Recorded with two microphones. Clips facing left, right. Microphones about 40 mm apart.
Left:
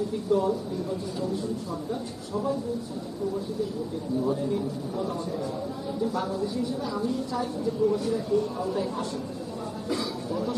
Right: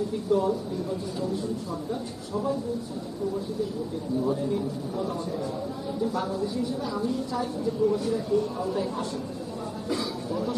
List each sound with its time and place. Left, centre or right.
0.3 s a man's voice: centre
4.2 s a man's voice: centre